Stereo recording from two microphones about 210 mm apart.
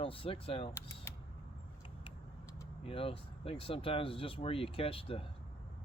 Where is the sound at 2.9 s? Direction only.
25° left (ahead or behind).